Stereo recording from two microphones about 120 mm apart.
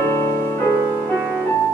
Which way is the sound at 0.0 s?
25° left (ahead or behind).